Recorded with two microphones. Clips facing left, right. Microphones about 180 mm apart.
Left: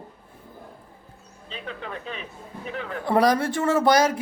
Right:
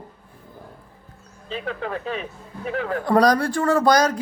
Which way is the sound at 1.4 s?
40° right (ahead or behind).